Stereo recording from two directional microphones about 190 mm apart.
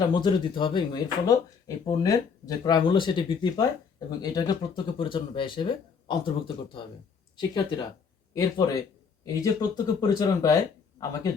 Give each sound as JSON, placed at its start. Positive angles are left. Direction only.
{"t": 0.1, "sound": "speech", "side_deg": 25}
{"t": 7.3, "sound": "speech", "side_deg": 25}